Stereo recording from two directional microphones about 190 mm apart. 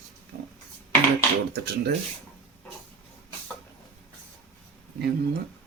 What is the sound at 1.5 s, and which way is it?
Speech, 60° right (ahead or behind).